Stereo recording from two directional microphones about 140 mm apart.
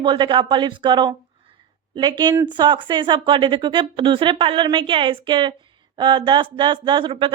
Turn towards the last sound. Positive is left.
turn(degrees=-35)  # may be behind; listen again after turning